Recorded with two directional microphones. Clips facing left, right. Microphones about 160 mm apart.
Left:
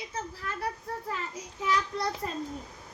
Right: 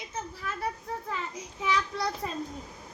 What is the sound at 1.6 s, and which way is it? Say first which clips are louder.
Speech: even; centre (ahead or behind).